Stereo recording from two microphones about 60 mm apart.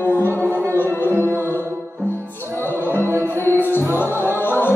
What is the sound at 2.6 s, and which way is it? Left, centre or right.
Music, left.